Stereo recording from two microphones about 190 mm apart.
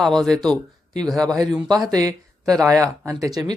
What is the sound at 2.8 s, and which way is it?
Speech, 15° right (ahead or behind).